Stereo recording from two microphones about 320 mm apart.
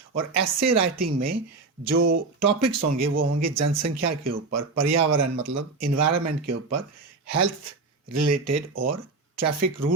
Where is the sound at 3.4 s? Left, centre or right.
Right.